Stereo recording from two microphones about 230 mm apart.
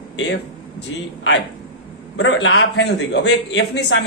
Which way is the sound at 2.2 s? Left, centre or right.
Left.